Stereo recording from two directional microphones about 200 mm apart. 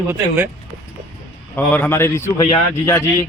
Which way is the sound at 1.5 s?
10° left (ahead or behind).